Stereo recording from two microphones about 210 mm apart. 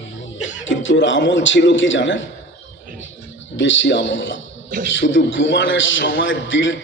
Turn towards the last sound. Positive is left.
turn(degrees=65)  # may be behind; listen again after turning